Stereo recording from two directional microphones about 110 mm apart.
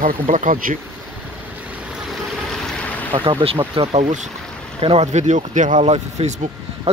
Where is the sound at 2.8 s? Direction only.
15° left (ahead or behind).